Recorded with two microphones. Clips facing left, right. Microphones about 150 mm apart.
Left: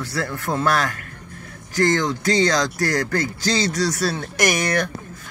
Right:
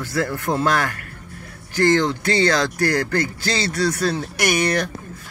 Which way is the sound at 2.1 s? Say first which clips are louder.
Even; 15° left (ahead or behind).